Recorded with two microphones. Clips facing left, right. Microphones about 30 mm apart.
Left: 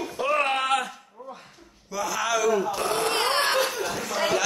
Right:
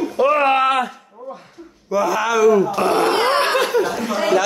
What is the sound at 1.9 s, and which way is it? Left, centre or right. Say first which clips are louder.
Speech: right 9 dB; centre.